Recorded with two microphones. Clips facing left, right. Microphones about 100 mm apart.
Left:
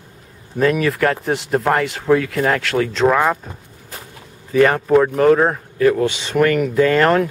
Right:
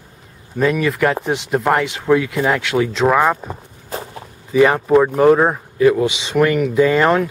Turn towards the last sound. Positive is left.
turn(degrees=-5)  # may be behind; listen again after turning